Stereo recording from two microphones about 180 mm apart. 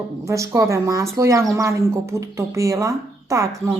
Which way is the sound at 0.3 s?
15° right (ahead or behind).